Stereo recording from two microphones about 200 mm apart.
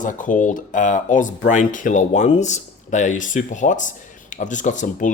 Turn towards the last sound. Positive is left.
turn(degrees=40)  # may be behind; listen again after turning